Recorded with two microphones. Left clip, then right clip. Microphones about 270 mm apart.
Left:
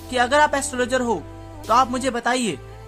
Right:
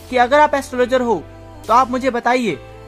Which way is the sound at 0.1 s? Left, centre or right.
Right.